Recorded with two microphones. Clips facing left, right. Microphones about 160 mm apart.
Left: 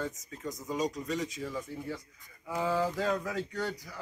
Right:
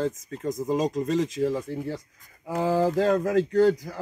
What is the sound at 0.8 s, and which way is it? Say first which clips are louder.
Speech: right 5 dB; 90° right.